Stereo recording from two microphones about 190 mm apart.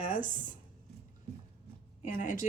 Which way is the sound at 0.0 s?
40° left (ahead or behind).